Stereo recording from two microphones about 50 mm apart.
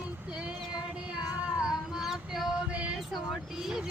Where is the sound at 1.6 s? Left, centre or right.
Centre.